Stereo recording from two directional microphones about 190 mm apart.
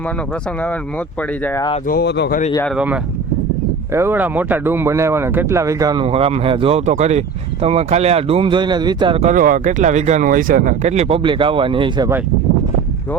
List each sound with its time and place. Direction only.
1.9 s speech: 60° left (ahead or behind)
2.6 s speech: 5° right (ahead or behind); by 9.3 s 30° right (ahead or behind)
9.3 s speech: 45° right (ahead or behind); by 12.0 s 25° right (ahead or behind)